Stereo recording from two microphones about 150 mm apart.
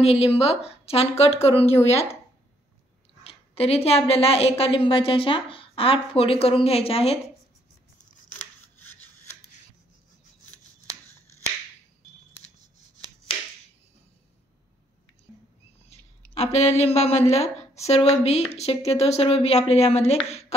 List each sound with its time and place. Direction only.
0.0 s a woman's voice: 40° left (ahead or behind)
3.3 s a woman's voice: 40° left (ahead or behind)
8.3 s scissors: 15° left (ahead or behind)
15.9 s a sound: 45° left (ahead or behind)
17.3 s a woman's voice: 45° left (ahead or behind)